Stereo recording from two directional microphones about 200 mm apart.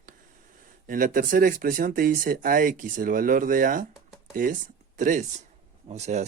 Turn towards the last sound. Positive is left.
turn(degrees=-35)  # may be behind; listen again after turning